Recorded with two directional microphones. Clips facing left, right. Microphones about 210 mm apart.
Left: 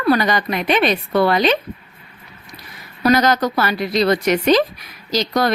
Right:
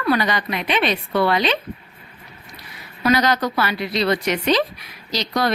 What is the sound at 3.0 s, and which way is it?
A woman's voice, 45° left (ahead or behind).